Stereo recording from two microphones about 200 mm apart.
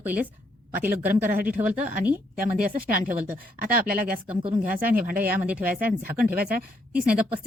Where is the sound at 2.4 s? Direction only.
45° right (ahead or behind).